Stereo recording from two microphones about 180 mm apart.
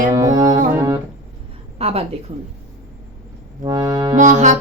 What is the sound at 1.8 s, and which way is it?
Speech, 35° right (ahead or behind).